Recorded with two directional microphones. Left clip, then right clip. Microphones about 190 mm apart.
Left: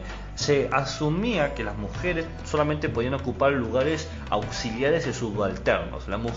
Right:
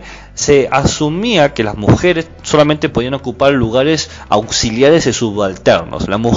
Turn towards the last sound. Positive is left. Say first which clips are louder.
# right 13 dB
turn(degrees=-55)  # may be behind; listen again after turning